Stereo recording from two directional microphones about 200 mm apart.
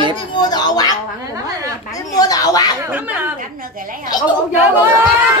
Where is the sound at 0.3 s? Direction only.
20° left (ahead or behind).